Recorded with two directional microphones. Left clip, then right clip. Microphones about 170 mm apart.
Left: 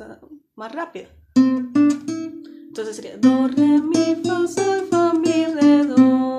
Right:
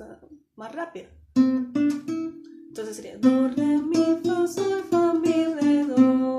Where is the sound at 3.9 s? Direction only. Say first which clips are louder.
Left 3 dB; 40° left (ahead or behind).